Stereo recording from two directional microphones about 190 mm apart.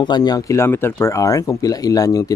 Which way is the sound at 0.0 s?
20° left (ahead or behind).